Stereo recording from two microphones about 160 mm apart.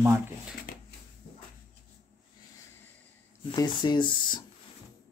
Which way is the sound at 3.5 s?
25° left (ahead or behind).